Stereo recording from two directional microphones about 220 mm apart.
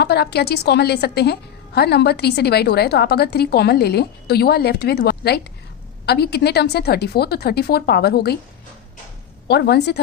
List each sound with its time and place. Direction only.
0.0 s a woman's voice: 50° left (ahead or behind)
9.5 s a woman's voice: 50° left (ahead or behind)